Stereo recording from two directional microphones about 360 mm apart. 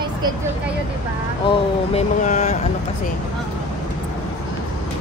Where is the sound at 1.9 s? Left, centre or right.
Centre.